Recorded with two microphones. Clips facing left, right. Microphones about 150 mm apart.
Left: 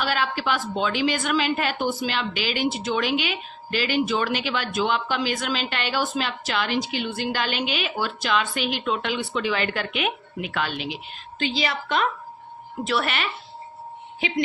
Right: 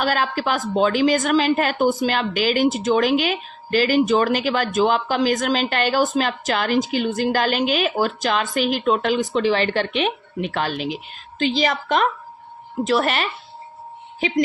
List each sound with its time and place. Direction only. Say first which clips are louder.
0.0 s a woman's voice: right 4 dB; 45° right (ahead or behind)